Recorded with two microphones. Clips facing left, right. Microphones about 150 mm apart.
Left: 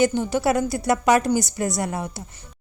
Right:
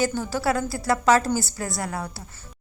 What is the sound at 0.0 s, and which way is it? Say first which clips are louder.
A woman's voice: left 4 dB; 20° left (ahead or behind).